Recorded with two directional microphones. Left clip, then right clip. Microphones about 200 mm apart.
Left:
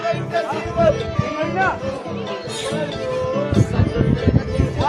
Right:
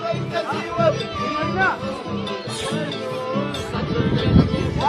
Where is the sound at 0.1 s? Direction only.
35° right (ahead or behind).